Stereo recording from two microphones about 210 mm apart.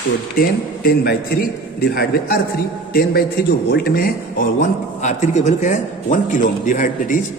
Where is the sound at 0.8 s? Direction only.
45° left (ahead or behind).